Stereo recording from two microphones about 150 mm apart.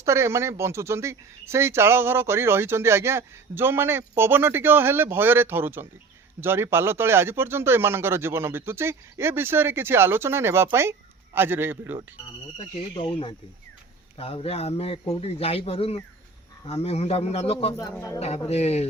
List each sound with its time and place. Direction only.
0.0 s speech: 20° right (ahead or behind)
12.5 s a man's voice: 35° left (ahead or behind)
14.2 s a man's voice: 40° left (ahead or behind)